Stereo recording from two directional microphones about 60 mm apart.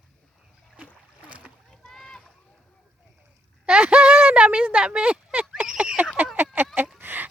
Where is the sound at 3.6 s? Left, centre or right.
Centre.